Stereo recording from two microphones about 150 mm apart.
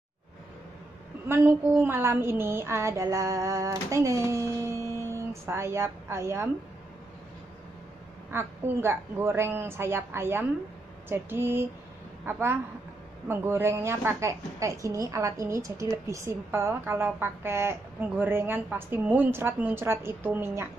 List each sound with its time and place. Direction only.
1.3 s speech: 15° right (ahead or behind)
8.3 s a woman's voice: 15° right (ahead or behind)